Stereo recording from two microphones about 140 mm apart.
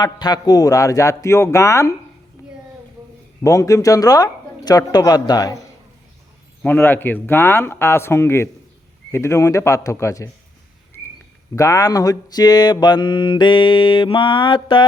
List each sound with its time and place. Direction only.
0.0 s speech: 30° left (ahead or behind)
3.4 s speech: 20° left (ahead or behind)
6.6 s speech: 15° left (ahead or behind)
11.5 s mantra: 25° left (ahead or behind)